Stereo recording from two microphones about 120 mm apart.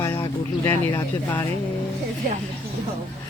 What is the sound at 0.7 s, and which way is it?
Speech, 15° left (ahead or behind).